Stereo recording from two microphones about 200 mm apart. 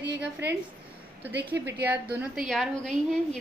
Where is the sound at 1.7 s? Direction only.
10° right (ahead or behind).